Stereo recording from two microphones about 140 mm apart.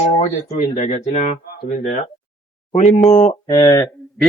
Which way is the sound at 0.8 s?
45° left (ahead or behind).